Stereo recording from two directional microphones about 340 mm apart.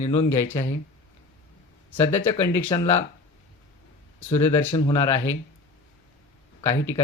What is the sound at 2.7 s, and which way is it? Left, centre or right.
Speech, centre.